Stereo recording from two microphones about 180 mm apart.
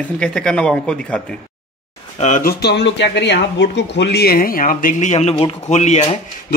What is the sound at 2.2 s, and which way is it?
Speech, 45° left (ahead or behind).